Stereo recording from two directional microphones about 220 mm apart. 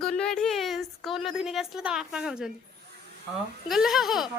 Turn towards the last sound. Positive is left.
turn(degrees=0)  # may be behind; listen again after turning